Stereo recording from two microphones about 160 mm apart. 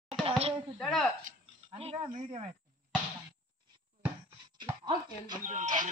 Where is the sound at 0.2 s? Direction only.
35° right (ahead or behind).